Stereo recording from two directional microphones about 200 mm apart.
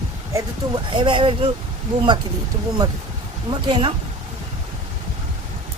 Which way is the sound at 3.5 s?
25° right (ahead or behind).